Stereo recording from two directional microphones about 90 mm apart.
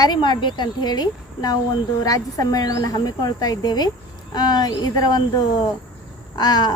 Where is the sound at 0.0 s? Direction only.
55° left (ahead or behind).